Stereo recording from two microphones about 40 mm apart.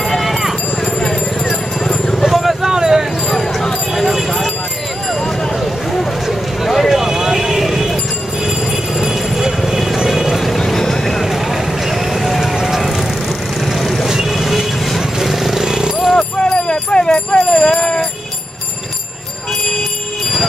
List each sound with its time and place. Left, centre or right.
0.0 s clip-clop: centre
1.9 s vehicle: centre
2.2 s a sound: centre
3.9 s a sound: centre
5.5 s a sound: centre
8.5 s train: centre
9.9 s vehicle: centre
10.6 s vehicle: centre
11.1 s vehicle: centre
16.2 s jingle bell: left